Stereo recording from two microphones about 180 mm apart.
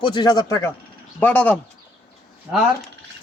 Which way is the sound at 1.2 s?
10° left (ahead or behind).